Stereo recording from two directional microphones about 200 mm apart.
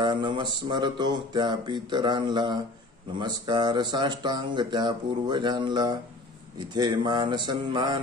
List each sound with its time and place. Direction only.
0.0 s speech: 25° right (ahead or behind)